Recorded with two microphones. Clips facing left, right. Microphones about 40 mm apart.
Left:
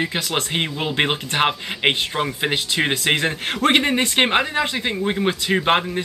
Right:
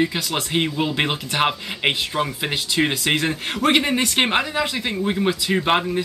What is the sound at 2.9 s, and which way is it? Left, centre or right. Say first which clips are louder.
Speech: left 1 dB; left.